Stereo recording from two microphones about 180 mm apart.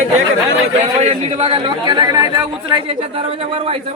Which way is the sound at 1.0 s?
40° right (ahead or behind).